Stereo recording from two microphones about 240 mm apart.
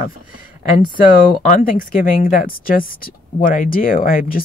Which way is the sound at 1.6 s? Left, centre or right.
Left.